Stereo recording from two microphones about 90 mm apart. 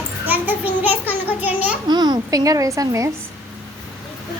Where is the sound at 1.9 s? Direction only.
55° right (ahead or behind); by 3.1 s 35° right (ahead or behind).